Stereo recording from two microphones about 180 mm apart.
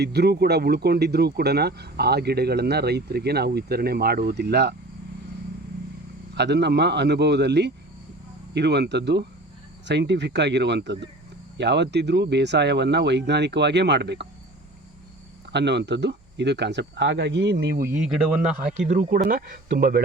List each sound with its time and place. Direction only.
0.0 s speech: 65° right (ahead or behind)
6.3 s speech: 70° right (ahead or behind)
15.5 s speech: 70° right (ahead or behind)
17.8 s speech: 10° right (ahead or behind)
18.9 s speech: 50° right (ahead or behind)